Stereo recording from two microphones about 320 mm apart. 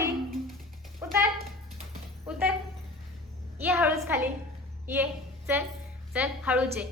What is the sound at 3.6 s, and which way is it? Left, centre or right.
Speech, centre.